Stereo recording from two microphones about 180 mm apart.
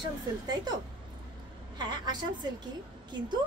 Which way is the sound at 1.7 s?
25° right (ahead or behind).